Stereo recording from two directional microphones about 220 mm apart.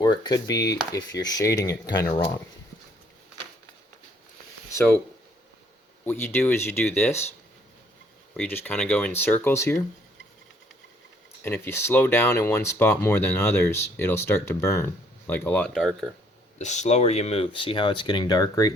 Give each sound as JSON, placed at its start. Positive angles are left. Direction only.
{"t": 0.0, "sound": "stir", "side_deg": 20}
{"t": 0.4, "sound": "speech", "side_deg": 15}
{"t": 6.1, "sound": "speech", "side_deg": 10}
{"t": 8.4, "sound": "speech", "side_deg": 10}
{"t": 11.4, "sound": "speech", "side_deg": 10}
{"t": 16.6, "sound": "speech", "side_deg": 30}